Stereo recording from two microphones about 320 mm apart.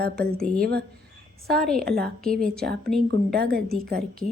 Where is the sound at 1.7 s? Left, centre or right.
Right.